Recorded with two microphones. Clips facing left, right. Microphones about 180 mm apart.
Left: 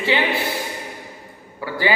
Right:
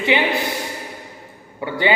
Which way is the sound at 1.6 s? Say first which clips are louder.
Right 2 dB; 20° right (ahead or behind).